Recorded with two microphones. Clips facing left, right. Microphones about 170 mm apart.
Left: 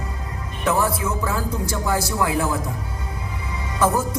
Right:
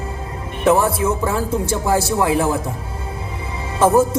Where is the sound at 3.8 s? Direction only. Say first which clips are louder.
Right 7 dB; 25° right (ahead or behind).